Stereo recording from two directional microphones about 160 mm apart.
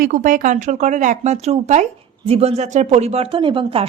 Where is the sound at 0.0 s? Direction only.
55° right (ahead or behind).